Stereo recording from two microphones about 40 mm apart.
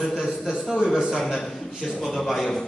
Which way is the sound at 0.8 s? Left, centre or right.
Centre.